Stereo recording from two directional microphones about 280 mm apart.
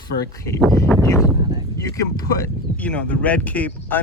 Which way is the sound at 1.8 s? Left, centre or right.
Centre.